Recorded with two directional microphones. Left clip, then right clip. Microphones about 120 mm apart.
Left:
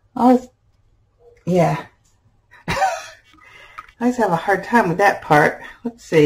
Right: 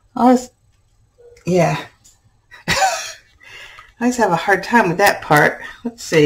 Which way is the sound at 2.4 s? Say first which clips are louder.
Right 3 dB; 15° right (ahead or behind).